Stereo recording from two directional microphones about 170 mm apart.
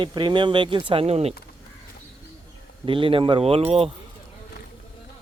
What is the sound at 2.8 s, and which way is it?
Speech, 30° right (ahead or behind).